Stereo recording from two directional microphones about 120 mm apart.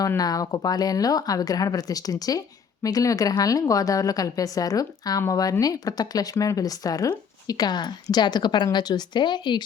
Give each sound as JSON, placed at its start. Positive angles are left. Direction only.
{"t": 0.2, "sound": "a woman's voice", "side_deg": 30}